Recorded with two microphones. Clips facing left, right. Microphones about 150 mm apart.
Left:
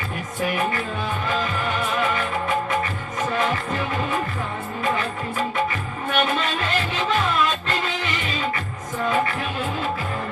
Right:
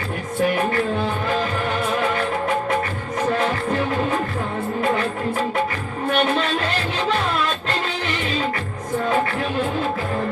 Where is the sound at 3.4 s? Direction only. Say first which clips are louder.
Right 3 dB; 45° right (ahead or behind).